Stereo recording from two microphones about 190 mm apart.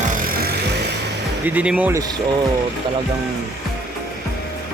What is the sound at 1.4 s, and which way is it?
Speech, 10° right (ahead or behind).